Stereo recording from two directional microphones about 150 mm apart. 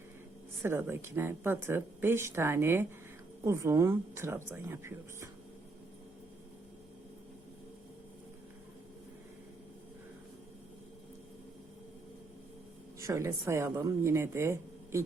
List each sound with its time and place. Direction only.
0.6 s speech: 15° right (ahead or behind)
13.0 s speech: 20° right (ahead or behind)